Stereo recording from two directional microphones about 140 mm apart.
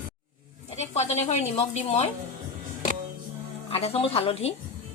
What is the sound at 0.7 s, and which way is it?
Speech, 50° left (ahead or behind).